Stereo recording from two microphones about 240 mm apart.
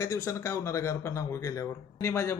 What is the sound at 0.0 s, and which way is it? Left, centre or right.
Speech, centre.